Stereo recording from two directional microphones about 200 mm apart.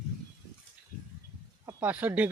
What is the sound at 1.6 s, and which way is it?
Speech, 10° right (ahead or behind).